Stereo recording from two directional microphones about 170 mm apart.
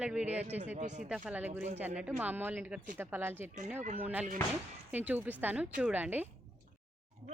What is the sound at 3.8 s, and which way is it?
Speech, 45° right (ahead or behind).